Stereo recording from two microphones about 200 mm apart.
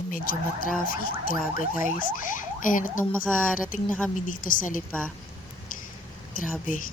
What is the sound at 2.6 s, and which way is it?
Speech, 40° left (ahead or behind).